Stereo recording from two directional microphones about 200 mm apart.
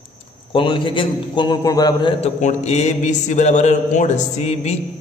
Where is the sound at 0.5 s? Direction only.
25° left (ahead or behind).